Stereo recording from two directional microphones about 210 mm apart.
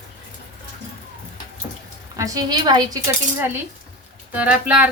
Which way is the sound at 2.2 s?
15° right (ahead or behind).